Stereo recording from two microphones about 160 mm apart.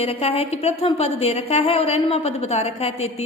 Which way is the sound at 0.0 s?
40° left (ahead or behind).